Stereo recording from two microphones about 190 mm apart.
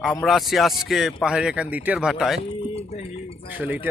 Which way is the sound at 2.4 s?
30° left (ahead or behind).